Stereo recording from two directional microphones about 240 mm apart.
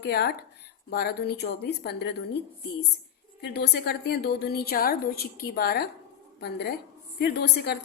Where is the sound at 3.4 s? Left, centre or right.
Left.